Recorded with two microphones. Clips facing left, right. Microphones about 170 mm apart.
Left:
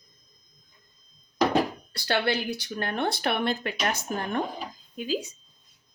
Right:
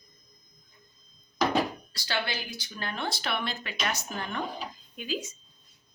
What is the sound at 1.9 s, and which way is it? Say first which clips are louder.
Speech: left 8 dB; 60° left (ahead or behind).